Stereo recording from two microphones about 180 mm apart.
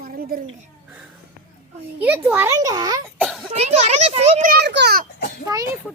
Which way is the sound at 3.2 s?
Centre (ahead or behind).